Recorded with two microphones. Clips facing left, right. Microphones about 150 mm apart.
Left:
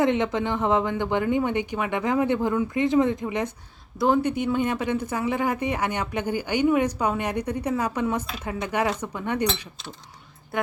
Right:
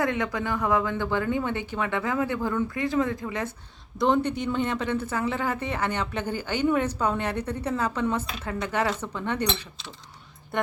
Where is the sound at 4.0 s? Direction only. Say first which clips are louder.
Left 2 dB; 5° left (ahead or behind).